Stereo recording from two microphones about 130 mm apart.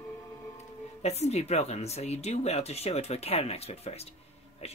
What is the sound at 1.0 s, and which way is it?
A woman's voice, 55° left (ahead or behind).